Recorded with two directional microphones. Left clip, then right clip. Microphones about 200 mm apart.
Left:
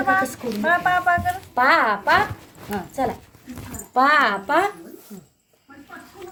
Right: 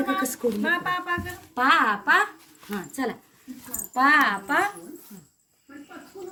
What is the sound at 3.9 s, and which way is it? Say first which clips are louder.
Speech: left 3 dB; 25° left (ahead or behind).